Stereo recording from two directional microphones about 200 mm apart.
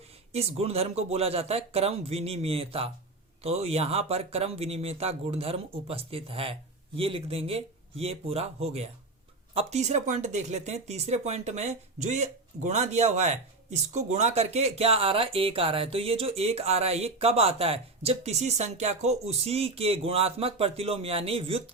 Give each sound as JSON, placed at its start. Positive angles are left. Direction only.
{"t": 0.3, "sound": "speech", "side_deg": -30}